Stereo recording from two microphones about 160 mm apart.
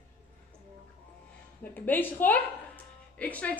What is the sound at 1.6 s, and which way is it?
A woman's voice, 10° left (ahead or behind).